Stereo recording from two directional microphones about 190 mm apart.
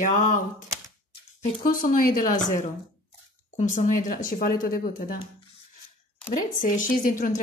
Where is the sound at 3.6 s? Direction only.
40° left (ahead or behind).